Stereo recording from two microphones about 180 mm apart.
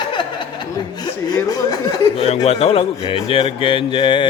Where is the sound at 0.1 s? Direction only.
25° left (ahead or behind).